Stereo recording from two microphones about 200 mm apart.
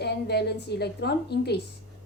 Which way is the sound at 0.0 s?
55° left (ahead or behind).